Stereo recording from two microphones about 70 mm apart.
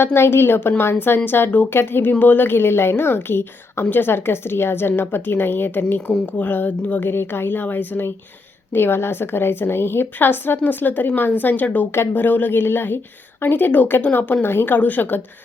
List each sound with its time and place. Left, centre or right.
0.0 s a woman's voice: left
7.1 s a woman's voice: left